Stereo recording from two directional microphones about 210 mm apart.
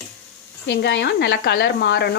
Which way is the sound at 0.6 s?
55° left (ahead or behind).